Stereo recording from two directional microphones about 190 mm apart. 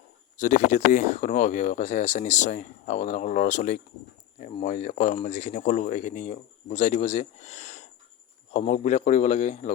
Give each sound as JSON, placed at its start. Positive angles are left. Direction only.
{"t": 0.3, "sound": "speech", "side_deg": 40}